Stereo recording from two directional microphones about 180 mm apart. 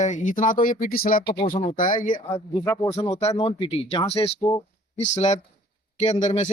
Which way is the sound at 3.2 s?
35° left (ahead or behind).